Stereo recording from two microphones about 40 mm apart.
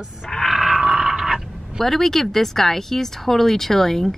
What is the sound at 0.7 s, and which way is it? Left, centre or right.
Grunt, right.